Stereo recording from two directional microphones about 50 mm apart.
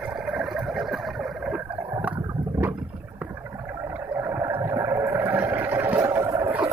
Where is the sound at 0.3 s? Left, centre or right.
Centre.